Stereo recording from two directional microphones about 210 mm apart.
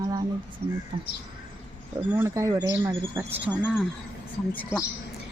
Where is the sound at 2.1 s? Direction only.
15° right (ahead or behind).